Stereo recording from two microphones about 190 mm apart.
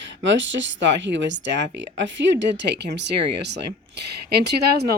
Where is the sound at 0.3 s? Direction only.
75° right (ahead or behind).